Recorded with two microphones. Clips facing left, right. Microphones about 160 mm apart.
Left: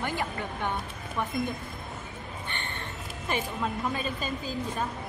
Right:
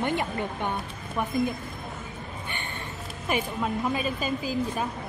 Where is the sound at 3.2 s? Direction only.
10° right (ahead or behind).